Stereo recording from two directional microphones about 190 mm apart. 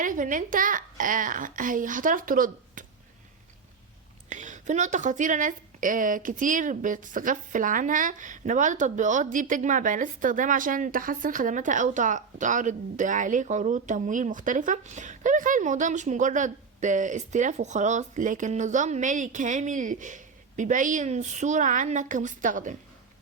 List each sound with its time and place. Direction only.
0.0 s a woman's voice: 45° right (ahead or behind)
4.3 s speech: 40° right (ahead or behind)